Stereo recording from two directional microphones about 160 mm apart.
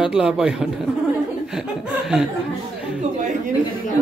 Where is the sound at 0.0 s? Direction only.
5° right (ahead or behind).